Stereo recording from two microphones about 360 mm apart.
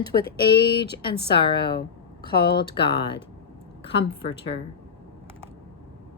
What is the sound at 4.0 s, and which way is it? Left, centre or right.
Speech, left.